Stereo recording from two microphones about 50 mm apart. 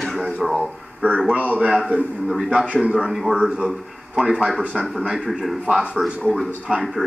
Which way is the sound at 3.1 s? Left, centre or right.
Centre.